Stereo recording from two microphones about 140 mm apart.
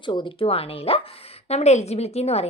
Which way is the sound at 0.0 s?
35° left (ahead or behind).